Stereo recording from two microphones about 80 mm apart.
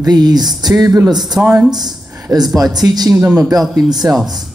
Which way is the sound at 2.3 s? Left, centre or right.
Right.